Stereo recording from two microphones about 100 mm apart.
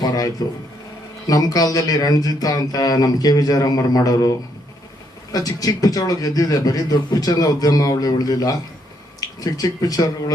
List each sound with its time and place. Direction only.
0.0 s a sound: 40° left (ahead or behind)
1.3 s a man's voice: 40° left (ahead or behind)
5.3 s a man's voice: 40° left (ahead or behind)